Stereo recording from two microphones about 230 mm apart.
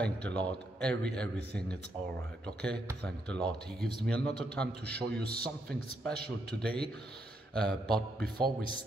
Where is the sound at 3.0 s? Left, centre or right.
Centre.